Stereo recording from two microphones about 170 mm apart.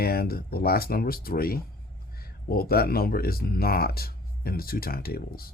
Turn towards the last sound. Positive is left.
turn(degrees=60)  # may be behind; listen again after turning